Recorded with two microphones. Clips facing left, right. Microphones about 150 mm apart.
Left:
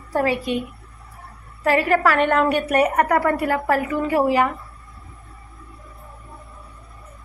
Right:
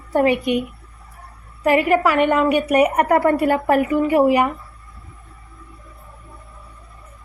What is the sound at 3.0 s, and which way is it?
A woman's voice, 25° right (ahead or behind).